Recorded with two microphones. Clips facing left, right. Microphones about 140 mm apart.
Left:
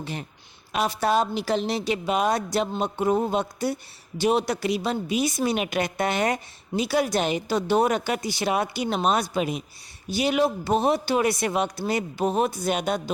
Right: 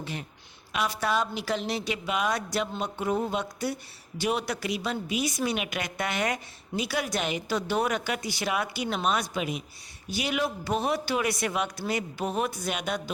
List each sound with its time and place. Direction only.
0.0 s a woman's voice: 35° left (ahead or behind)